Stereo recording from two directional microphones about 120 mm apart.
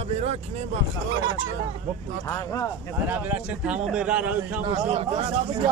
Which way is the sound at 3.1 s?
10° right (ahead or behind).